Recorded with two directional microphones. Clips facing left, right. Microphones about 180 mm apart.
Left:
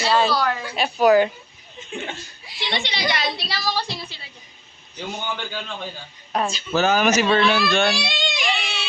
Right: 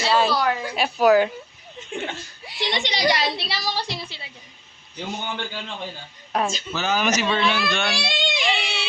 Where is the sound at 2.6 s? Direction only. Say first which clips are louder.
Right 2 dB; 40° right (ahead or behind).